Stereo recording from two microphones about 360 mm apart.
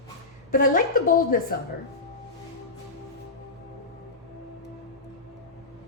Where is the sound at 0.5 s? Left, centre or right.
Left.